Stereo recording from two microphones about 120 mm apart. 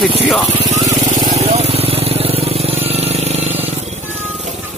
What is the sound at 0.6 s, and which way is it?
Vehicle, 70° right (ahead or behind).